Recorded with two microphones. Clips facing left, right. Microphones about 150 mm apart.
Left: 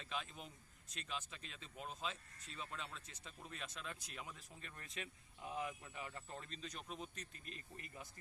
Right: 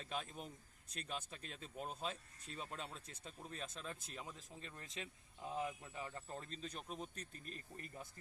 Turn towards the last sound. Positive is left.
turn(degrees=-40)  # may be behind; listen again after turning